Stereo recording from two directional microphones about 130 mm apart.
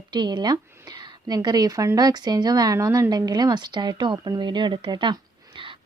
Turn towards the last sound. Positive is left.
turn(degrees=-40)  # may be behind; listen again after turning